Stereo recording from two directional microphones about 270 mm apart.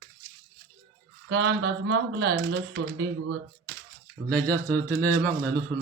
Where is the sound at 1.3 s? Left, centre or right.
Right.